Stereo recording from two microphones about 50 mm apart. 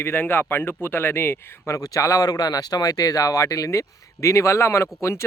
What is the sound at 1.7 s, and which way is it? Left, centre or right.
Speech, left.